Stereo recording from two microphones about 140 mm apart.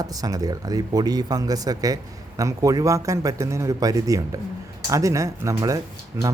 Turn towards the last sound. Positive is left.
turn(degrees=-25)  # may be behind; listen again after turning